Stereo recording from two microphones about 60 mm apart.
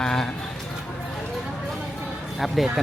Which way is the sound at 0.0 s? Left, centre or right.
Centre.